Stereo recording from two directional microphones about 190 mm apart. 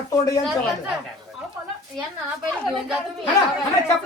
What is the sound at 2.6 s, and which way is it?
Speech, centre (ahead or behind).